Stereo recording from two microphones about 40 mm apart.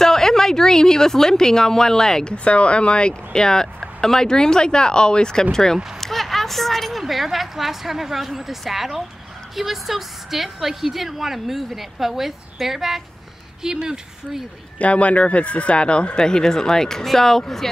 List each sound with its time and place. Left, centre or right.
0.0 s a woman's voice: centre
2.3 s a woman's voice: left; by 13.9 s centre
14.8 s speech: left; by 17.6 s centre